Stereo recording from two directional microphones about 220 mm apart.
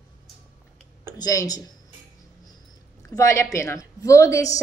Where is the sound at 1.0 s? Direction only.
15° left (ahead or behind).